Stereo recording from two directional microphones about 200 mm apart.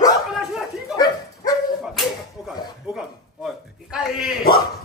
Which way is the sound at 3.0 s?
5° right (ahead or behind).